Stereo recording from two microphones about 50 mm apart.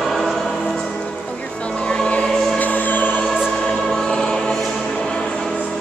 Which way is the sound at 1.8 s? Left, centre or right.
Left.